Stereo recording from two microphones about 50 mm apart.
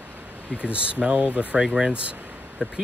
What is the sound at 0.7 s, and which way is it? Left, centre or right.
Speech, right.